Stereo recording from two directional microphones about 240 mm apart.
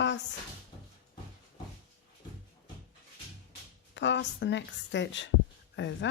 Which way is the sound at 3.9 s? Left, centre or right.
Left.